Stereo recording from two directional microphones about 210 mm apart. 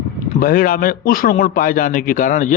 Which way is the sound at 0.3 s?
45° left (ahead or behind).